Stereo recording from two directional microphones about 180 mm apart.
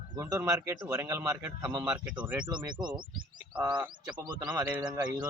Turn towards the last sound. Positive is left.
turn(degrees=-20)  # may be behind; listen again after turning